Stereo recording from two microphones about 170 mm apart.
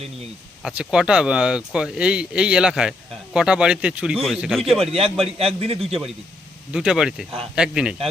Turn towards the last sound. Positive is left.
turn(degrees=-5)  # may be behind; listen again after turning